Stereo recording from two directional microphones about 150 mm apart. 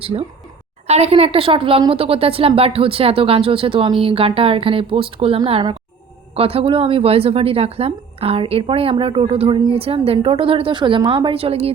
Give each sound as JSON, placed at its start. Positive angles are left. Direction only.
{"t": 0.0, "sound": "a woman's voice", "side_deg": -40}